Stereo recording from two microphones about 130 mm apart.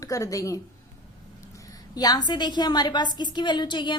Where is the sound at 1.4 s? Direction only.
25° left (ahead or behind).